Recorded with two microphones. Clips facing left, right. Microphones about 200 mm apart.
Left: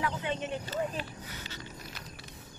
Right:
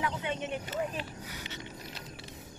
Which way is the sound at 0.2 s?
15° right (ahead or behind).